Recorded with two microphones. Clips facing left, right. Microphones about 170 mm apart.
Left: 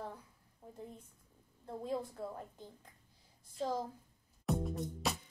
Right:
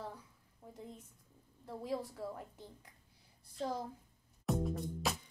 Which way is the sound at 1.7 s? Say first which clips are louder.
Left 1 dB; 20° left (ahead or behind).